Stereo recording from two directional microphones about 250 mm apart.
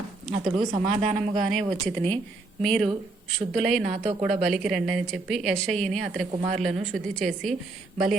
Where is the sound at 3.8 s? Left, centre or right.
Right.